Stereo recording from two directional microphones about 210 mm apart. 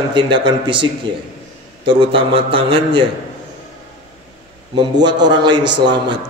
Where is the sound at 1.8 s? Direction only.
25° right (ahead or behind).